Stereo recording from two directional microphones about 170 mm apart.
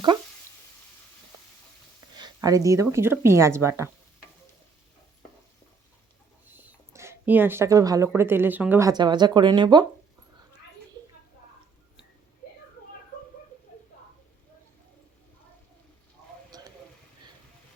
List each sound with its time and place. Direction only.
2.1 s speech: 25° right (ahead or behind)
6.5 s speech: 10° right (ahead or behind)
8.9 s speech: 25° right (ahead or behind)
16.5 s a sound: 25° right (ahead or behind)